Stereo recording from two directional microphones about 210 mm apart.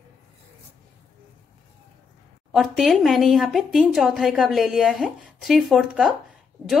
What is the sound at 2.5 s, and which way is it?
A woman's voice, centre (ahead or behind).